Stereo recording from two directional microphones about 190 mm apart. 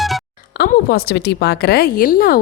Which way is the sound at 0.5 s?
55° left (ahead or behind).